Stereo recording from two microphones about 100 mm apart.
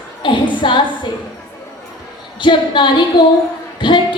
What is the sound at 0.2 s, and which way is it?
Speech, 55° left (ahead or behind).